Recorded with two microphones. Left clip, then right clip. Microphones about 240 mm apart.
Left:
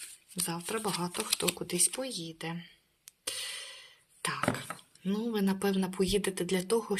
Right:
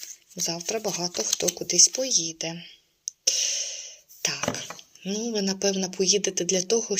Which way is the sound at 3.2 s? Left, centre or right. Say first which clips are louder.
Right 13 dB; centre.